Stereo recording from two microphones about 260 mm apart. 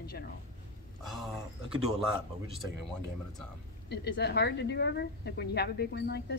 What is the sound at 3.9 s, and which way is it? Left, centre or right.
Speech, left.